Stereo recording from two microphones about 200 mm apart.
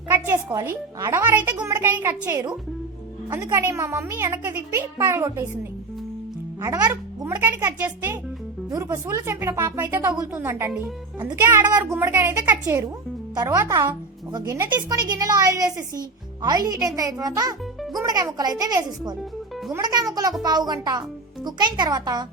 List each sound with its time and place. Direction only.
0.1 s a child's voice: 15° right (ahead or behind)
6.6 s a child's voice: 20° right (ahead or behind)
10.7 s speech: 5° right (ahead or behind)
11.2 s a child's voice: 15° right (ahead or behind)